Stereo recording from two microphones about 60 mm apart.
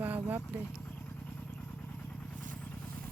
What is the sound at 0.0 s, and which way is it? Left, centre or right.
Vehicle, right.